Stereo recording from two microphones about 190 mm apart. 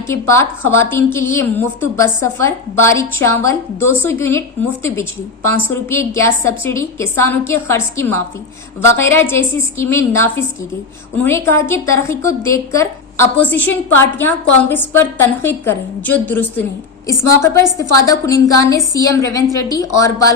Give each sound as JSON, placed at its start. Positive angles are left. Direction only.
{"t": 0.1, "sound": "a woman's voice", "side_deg": 15}